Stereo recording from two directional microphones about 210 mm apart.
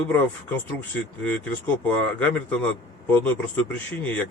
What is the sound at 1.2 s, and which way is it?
Speech, 5° left (ahead or behind).